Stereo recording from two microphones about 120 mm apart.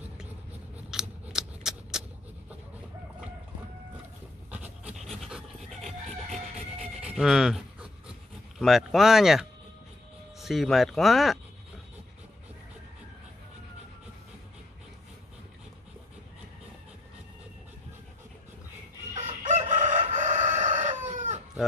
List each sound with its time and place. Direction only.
0.8 s scissors: 5° right (ahead or behind)
4.8 s pant: centre (ahead or behind)
7.0 s a sound: 5° right (ahead or behind)
8.5 s speech: centre (ahead or behind)
19.1 s crowing: 80° right
19.7 s chicken: 90° right